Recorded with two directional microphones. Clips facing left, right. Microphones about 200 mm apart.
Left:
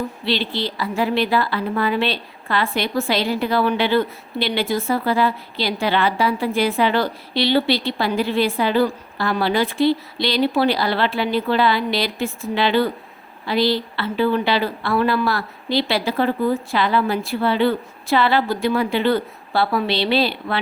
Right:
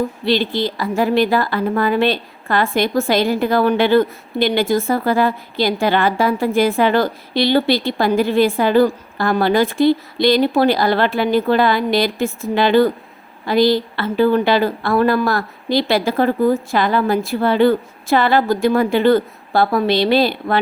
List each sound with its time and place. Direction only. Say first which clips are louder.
0.3 s a woman's voice: right 5 dB; 45° right (ahead or behind)